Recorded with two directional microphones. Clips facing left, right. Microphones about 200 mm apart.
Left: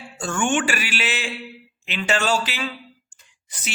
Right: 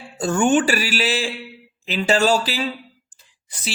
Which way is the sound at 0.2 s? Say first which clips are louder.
Right 6 dB; 40° right (ahead or behind).